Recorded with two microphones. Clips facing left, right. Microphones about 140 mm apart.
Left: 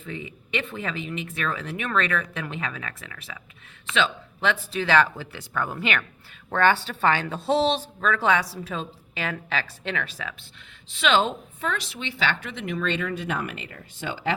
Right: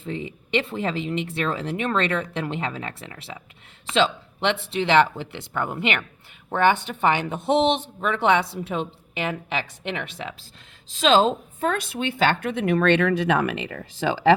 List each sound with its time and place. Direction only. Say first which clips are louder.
0.0 s speech: right 5 dB; 30° right (ahead or behind)
10.9 s speech: right 4 dB; 35° right (ahead or behind); by 14.3 s 90° right